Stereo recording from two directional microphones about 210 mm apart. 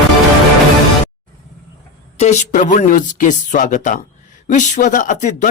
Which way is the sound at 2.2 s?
35° left (ahead or behind).